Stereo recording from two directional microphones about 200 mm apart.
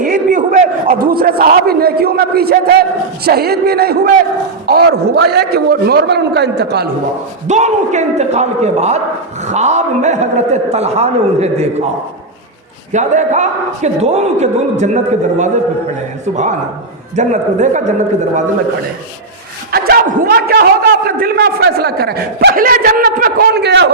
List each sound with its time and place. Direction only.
0.0 s a sound: 45° right (ahead or behind)
3.2 s a man's voice: 50° right (ahead or behind)
7.4 s a man's voice: 35° right (ahead or behind)
12.9 s a man's voice: 35° right (ahead or behind)
16.2 s a man's voice: 35° right (ahead or behind)
19.7 s a man's voice: 50° right (ahead or behind)